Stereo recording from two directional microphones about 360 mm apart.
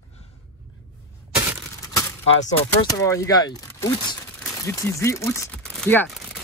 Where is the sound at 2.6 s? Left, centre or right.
Centre.